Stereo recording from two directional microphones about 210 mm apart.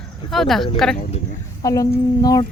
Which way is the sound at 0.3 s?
Centre (ahead or behind).